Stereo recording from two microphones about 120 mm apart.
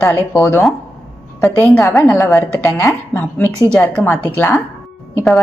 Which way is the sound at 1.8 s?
30° left (ahead or behind).